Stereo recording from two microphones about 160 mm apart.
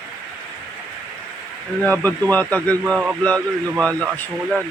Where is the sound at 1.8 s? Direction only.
10° left (ahead or behind).